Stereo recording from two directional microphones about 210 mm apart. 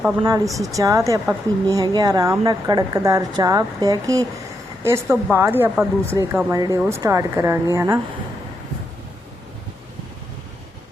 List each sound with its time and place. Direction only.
0.3 s speech: 15° right (ahead or behind)